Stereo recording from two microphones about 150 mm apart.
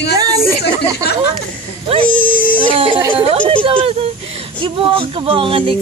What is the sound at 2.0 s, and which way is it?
Speech, 10° left (ahead or behind).